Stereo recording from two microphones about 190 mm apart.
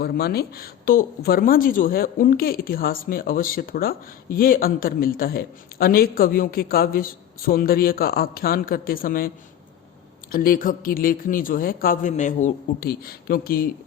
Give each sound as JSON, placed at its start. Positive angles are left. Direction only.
{"t": 0.0, "sound": "a woman's voice", "side_deg": 55}
{"t": 10.3, "sound": "a woman's voice", "side_deg": 50}